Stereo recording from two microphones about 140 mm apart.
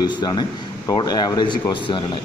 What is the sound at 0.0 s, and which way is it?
A man's voice, 30° left (ahead or behind).